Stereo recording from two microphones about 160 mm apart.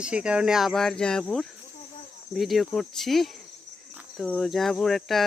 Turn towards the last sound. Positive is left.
turn(degrees=0)  # may be behind; listen again after turning